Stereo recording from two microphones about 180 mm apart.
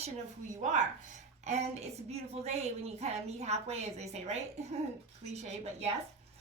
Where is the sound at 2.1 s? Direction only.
35° right (ahead or behind).